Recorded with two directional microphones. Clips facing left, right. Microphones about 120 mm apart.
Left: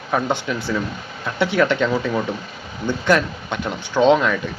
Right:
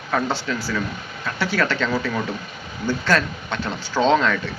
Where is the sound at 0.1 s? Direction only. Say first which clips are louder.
Left 2 dB; 15° left (ahead or behind).